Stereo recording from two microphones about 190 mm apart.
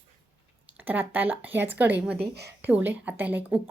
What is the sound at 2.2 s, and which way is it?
Speech, 60° right (ahead or behind).